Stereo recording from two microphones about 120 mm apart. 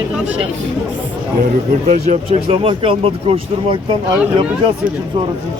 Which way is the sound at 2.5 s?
50° right (ahead or behind).